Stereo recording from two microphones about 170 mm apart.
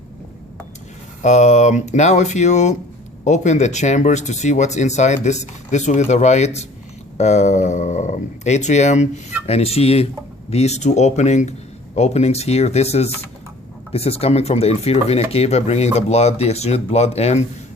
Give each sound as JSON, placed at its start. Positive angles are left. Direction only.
{"t": 1.2, "sound": "speech", "side_deg": 40}